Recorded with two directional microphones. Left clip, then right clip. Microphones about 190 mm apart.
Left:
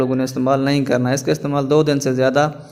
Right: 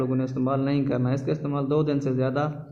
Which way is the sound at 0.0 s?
35° left (ahead or behind).